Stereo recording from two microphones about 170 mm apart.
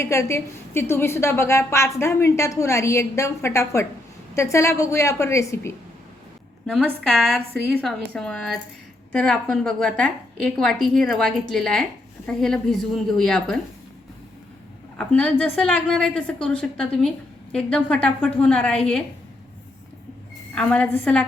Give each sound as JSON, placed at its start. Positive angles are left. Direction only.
{"t": 0.0, "sound": "a woman's voice", "side_deg": 15}
{"t": 6.7, "sound": "a woman's voice", "side_deg": 0}
{"t": 14.9, "sound": "a woman's voice", "side_deg": 5}
{"t": 20.6, "sound": "a woman's voice", "side_deg": 5}